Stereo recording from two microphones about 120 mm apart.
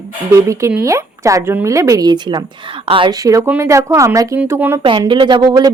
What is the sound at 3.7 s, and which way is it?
A woman's voice, 25° right (ahead or behind).